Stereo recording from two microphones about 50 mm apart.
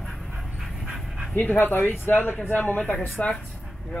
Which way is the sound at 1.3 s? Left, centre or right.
Left.